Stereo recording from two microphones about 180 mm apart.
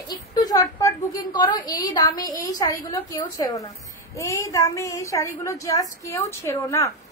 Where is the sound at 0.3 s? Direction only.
20° left (ahead or behind).